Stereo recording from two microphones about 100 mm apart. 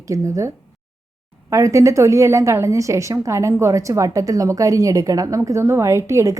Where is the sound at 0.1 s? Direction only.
30° right (ahead or behind).